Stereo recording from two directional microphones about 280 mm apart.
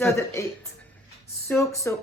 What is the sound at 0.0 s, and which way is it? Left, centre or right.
Speech, centre.